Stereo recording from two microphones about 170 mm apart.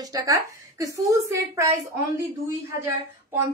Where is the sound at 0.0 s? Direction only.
20° right (ahead or behind).